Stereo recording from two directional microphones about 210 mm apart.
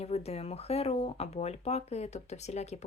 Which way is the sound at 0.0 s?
30° left (ahead or behind).